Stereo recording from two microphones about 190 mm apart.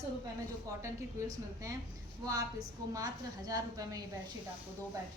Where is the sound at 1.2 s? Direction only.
15° right (ahead or behind).